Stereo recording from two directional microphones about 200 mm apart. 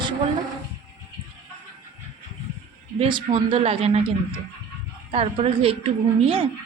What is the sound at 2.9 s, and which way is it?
A man's voice, 25° right (ahead or behind).